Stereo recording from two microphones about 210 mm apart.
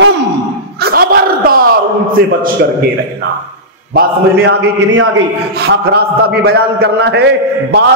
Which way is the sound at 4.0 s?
55° right (ahead or behind).